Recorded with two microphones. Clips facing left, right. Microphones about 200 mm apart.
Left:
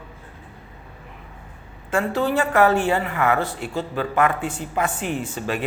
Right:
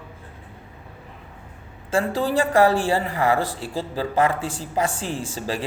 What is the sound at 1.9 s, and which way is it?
A man's voice, 35° right (ahead or behind).